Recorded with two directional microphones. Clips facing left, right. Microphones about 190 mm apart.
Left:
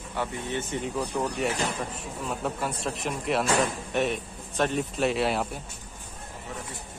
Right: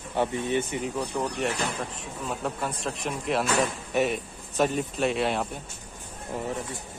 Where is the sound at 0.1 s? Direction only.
20° right (ahead or behind).